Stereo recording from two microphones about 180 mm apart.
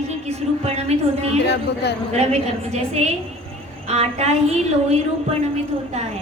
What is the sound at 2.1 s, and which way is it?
A woman's voice, 35° right (ahead or behind).